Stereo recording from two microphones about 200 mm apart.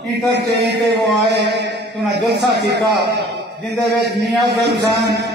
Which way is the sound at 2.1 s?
55° right (ahead or behind).